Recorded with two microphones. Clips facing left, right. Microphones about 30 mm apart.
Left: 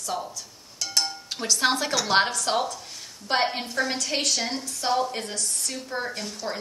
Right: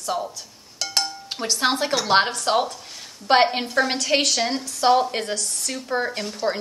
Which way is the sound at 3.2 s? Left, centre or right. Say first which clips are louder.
Right 7 dB; right.